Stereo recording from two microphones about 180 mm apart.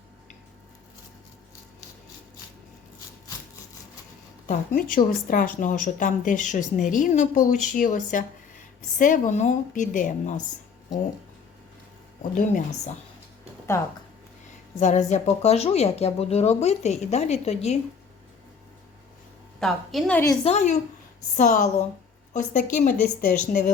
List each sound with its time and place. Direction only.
4.4 s a woman's voice: 50° left (ahead or behind)
12.3 s a woman's voice: 45° left (ahead or behind)
13.7 s speech: 15° left (ahead or behind)
14.8 s a woman's voice: 40° left (ahead or behind)
19.5 s a woman's voice: centre (ahead or behind)
20.4 s a woman's voice: 40° left (ahead or behind)